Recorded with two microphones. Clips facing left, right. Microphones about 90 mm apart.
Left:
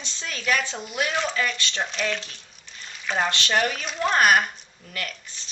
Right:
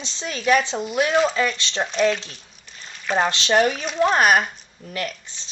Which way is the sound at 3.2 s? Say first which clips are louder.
Right 5 dB; 25° right (ahead or behind).